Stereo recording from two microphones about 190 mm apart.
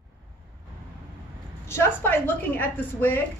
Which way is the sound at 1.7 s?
10° left (ahead or behind).